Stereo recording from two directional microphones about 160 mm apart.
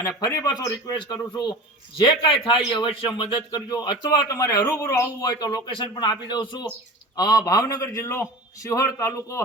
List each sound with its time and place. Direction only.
0.2 s a man's voice: 20° left (ahead or behind)